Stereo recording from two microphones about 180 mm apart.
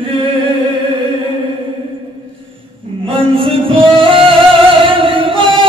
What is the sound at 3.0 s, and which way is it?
Music, 30° right (ahead or behind).